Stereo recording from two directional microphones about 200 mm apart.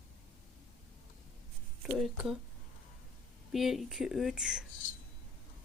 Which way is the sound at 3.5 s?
Centre (ahead or behind).